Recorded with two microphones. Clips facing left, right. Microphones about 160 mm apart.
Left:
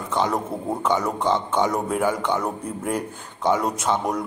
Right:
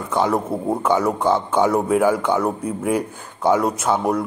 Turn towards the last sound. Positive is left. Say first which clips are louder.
# right 4 dB
turn(degrees=-5)  # may be behind; listen again after turning